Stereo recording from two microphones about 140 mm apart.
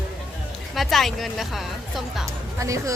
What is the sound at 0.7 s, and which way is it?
Speech, centre (ahead or behind).